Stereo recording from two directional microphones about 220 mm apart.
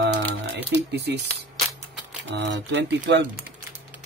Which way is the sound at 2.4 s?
55° right (ahead or behind).